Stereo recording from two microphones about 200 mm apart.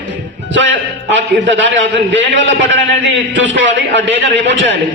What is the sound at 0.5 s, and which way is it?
A man's voice, 65° right (ahead or behind).